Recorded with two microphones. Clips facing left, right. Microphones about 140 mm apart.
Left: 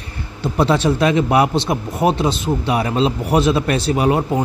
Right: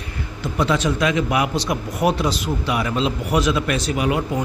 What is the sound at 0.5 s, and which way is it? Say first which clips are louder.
Speech: left 4 dB; 30° left (ahead or behind).